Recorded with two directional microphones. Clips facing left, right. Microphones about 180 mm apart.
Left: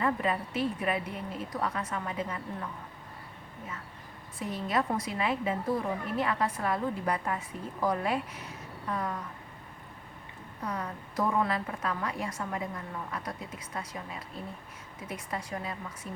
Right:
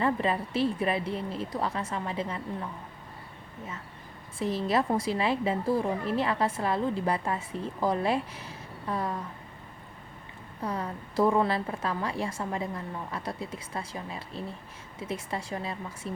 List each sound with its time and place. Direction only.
0.0 s a woman's voice: 30° right (ahead or behind)
4.4 s a woman's voice: 30° right (ahead or behind)
10.6 s a woman's voice: 30° right (ahead or behind)